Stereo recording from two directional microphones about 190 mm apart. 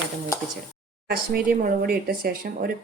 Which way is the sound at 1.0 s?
55° right (ahead or behind).